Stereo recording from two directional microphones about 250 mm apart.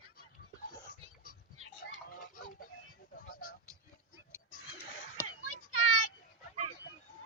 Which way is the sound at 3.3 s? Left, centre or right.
Left.